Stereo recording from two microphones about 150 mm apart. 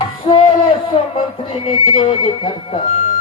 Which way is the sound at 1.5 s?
35° left (ahead or behind).